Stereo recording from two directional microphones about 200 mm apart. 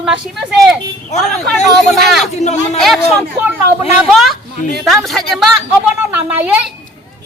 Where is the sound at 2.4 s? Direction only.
35° left (ahead or behind).